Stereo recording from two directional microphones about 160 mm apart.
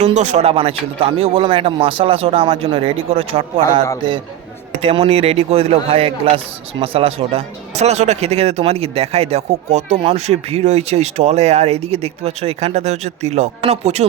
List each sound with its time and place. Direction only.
0.0 s a man's voice: 45° right (ahead or behind)
4.8 s a man's voice: 40° right (ahead or behind)